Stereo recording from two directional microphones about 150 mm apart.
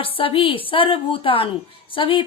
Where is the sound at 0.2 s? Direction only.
35° left (ahead or behind).